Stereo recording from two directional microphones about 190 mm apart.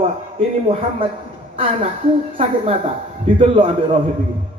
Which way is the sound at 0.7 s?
30° right (ahead or behind).